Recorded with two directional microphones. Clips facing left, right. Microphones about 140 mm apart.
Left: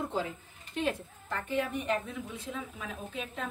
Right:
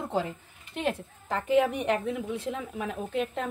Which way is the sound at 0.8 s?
80° right.